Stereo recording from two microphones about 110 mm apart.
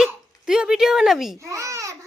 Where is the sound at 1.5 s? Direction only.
30° right (ahead or behind).